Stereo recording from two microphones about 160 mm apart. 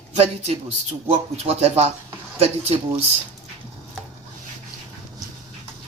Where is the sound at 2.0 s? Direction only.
40° right (ahead or behind).